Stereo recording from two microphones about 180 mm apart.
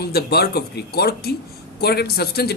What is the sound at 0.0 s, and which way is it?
Speech, 60° left (ahead or behind).